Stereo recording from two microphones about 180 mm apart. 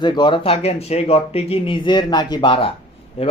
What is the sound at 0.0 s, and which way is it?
Speech, 25° left (ahead or behind).